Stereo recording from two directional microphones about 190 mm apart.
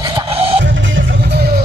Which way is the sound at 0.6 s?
75° right (ahead or behind).